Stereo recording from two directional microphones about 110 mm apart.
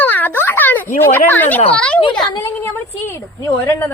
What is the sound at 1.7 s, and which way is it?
Speech, 10° left (ahead or behind).